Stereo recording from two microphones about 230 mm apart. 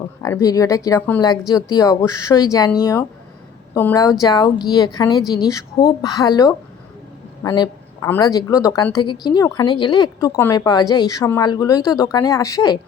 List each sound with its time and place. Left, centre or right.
0.2 s a woman's voice: centre